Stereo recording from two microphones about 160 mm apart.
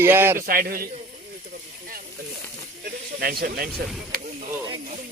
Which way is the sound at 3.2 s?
70° right (ahead or behind).